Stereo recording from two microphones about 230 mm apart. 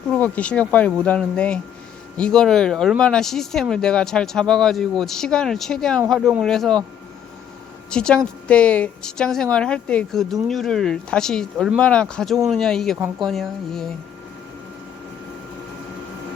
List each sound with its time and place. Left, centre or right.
0.1 s speech: centre
7.9 s speech: centre